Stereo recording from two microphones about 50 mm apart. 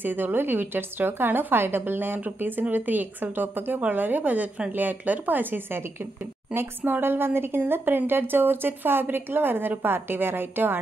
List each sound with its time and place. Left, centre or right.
0.0 s a woman's voice: right